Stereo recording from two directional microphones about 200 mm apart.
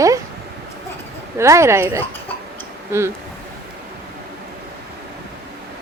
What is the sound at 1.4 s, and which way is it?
A woman's voice, 15° right (ahead or behind).